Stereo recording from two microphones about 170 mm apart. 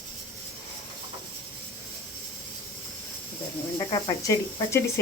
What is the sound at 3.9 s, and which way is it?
Speech, 25° left (ahead or behind).